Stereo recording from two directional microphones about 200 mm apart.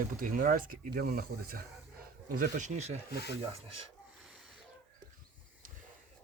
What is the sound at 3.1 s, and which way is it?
Speech, 55° left (ahead or behind).